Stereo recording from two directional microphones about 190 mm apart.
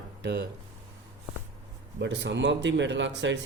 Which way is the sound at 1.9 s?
70° right (ahead or behind).